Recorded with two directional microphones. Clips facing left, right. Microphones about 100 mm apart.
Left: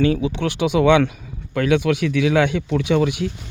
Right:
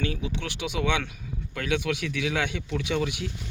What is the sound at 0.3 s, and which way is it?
Speech, 65° left (ahead or behind).